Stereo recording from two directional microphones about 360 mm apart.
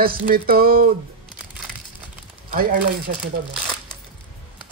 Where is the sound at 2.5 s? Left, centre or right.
Right.